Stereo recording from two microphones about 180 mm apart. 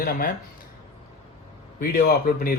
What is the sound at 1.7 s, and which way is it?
Speech, 50° left (ahead or behind).